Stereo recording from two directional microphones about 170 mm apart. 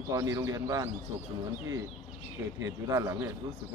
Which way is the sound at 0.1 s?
20° right (ahead or behind).